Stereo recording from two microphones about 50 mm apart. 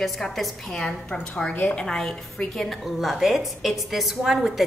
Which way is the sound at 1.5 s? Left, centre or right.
Left.